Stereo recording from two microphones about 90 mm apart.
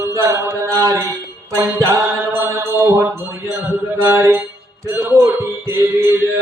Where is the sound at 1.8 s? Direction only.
35° right (ahead or behind).